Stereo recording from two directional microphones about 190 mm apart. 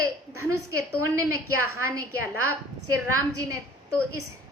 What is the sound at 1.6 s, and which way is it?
Speech, 15° right (ahead or behind).